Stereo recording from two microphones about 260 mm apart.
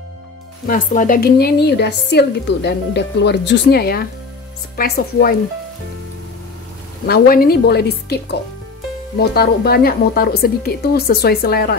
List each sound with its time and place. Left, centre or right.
0.7 s a woman's voice: left
7.1 s a woman's voice: left